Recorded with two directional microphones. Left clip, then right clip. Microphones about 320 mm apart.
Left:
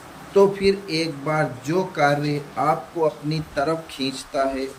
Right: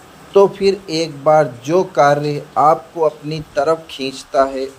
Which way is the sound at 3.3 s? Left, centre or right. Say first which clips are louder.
Right 7 dB; centre.